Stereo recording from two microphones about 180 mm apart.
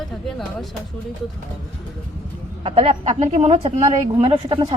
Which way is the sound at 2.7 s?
35° right (ahead or behind).